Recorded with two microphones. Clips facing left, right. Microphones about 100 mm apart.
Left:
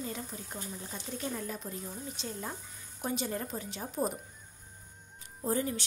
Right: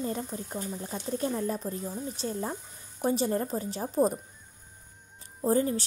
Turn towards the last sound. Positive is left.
turn(degrees=-35)  # may be behind; listen again after turning